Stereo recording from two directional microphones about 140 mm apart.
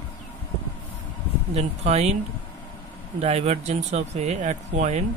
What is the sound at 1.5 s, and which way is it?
Speech, 50° right (ahead or behind).